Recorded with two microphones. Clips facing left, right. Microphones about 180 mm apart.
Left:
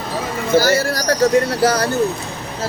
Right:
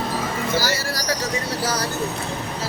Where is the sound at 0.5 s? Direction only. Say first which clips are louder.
Left 13 dB; 50° left (ahead or behind).